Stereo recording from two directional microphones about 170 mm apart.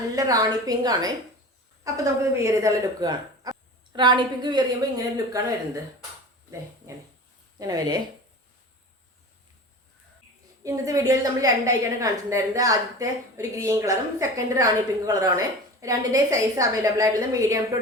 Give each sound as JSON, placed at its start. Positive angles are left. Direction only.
{"t": 0.2, "sound": "a woman's voice", "side_deg": -20}
{"t": 7.6, "sound": "a woman's voice", "side_deg": -25}
{"t": 10.6, "sound": "a woman's voice", "side_deg": -20}